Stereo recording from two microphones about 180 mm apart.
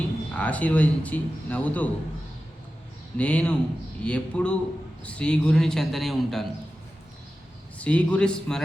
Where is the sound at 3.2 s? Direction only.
5° left (ahead or behind).